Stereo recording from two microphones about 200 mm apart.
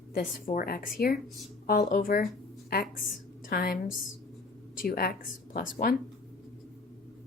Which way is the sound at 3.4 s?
45° left (ahead or behind).